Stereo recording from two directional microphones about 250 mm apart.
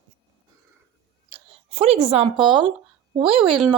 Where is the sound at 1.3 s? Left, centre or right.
Right.